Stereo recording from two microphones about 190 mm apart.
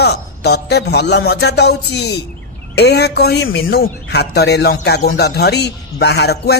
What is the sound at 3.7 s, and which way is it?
Speech, 60° left (ahead or behind).